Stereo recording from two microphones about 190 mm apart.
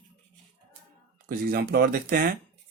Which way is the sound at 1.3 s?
50° right (ahead or behind).